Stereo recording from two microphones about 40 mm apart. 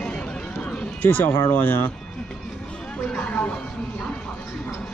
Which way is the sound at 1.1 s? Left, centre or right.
Left.